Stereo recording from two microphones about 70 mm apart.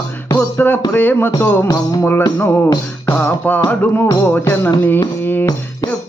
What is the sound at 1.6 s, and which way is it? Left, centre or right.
Music, left.